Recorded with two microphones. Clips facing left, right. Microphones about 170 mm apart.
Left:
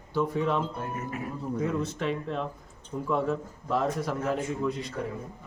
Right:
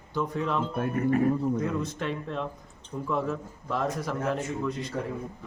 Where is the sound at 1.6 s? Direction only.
Centre (ahead or behind).